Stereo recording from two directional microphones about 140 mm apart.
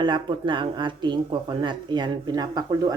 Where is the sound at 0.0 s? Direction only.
35° right (ahead or behind).